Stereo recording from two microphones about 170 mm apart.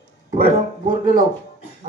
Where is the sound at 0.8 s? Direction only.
50° right (ahead or behind).